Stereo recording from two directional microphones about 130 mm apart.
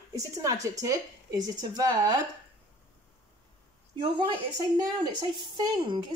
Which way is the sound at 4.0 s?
35° right (ahead or behind).